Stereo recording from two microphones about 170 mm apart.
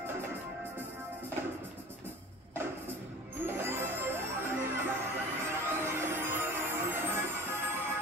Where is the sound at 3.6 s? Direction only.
15° right (ahead or behind).